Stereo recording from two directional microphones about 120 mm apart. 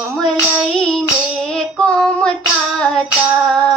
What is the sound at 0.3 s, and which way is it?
Child singing, 5° left (ahead or behind).